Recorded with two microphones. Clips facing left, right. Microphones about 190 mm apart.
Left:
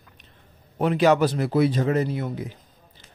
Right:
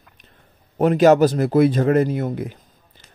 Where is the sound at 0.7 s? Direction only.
45° right (ahead or behind).